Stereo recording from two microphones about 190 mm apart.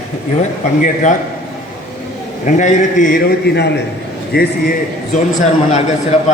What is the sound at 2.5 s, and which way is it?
Speech, 40° left (ahead or behind).